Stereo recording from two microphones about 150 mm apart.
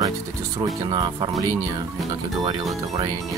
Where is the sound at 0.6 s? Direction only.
25° right (ahead or behind).